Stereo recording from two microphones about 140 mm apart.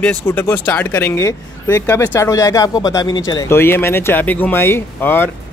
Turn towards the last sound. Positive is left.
turn(degrees=15)  # may be behind; listen again after turning